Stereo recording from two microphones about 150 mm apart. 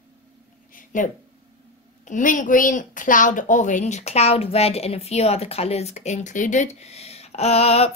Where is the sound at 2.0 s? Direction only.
60° left (ahead or behind).